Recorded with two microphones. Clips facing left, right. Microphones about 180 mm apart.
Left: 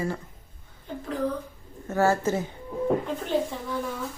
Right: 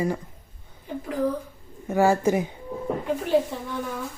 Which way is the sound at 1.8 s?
15° right (ahead or behind).